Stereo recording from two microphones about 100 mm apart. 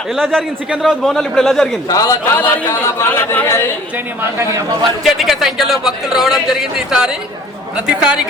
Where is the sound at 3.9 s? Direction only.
25° right (ahead or behind).